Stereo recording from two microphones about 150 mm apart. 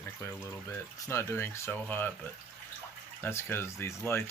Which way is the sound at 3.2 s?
15° left (ahead or behind).